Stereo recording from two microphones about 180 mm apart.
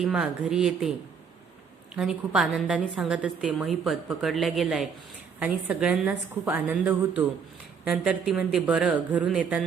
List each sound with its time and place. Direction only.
0.0 s a woman's voice: 5° right (ahead or behind)
2.0 s a woman's voice: 5° right (ahead or behind)